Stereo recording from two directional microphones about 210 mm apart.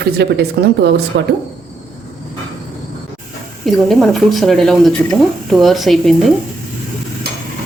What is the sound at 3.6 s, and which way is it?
Speech, centre (ahead or behind).